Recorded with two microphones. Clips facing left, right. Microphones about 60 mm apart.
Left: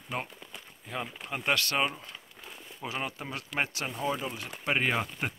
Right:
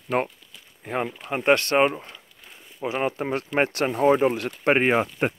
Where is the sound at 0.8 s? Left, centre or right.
Right.